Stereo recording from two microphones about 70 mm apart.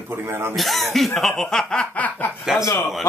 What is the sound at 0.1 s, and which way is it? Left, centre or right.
Speech, right.